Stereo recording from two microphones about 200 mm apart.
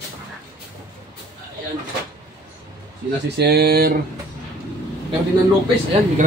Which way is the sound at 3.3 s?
55° right (ahead or behind).